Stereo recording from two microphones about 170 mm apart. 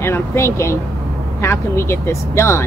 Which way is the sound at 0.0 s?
15° left (ahead or behind).